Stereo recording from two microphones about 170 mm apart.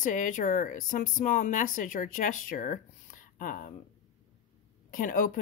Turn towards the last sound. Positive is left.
turn(degrees=55)  # may be behind; listen again after turning